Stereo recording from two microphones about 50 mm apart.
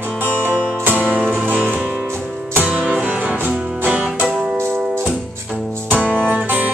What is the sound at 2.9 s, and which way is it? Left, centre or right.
Music, right.